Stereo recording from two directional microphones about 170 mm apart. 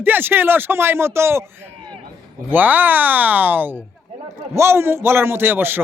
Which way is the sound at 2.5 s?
10° right (ahead or behind).